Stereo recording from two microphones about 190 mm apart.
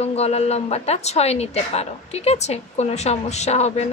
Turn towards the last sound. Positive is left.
turn(degrees=35)  # may be behind; listen again after turning